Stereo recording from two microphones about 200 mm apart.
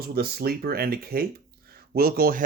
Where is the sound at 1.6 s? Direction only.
50° right (ahead or behind).